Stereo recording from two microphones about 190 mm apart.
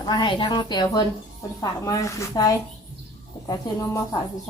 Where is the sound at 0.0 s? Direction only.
20° left (ahead or behind).